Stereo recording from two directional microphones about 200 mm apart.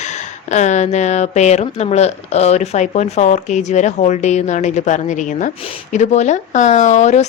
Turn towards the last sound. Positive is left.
turn(degrees=35)  # may be behind; listen again after turning